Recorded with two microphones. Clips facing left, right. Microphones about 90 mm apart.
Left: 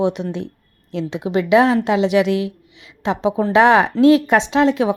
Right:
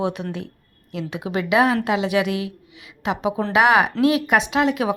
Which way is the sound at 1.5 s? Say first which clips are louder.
Left 4 dB; 25° left (ahead or behind).